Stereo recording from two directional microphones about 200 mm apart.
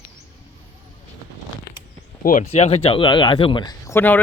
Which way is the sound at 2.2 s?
35° left (ahead or behind).